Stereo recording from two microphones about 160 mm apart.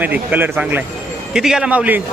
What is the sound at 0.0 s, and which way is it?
A man's voice, 10° right (ahead or behind).